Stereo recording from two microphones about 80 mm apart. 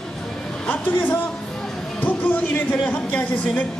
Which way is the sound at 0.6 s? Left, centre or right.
Left.